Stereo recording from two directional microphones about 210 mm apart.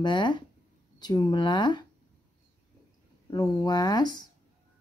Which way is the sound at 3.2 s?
20° left (ahead or behind).